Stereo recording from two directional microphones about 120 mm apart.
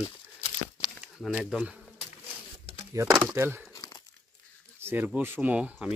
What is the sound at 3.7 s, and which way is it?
Crumpling, 30° left (ahead or behind).